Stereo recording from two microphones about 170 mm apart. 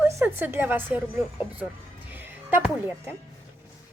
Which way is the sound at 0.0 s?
10° right (ahead or behind).